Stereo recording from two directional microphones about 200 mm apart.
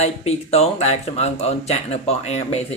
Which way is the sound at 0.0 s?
30° left (ahead or behind).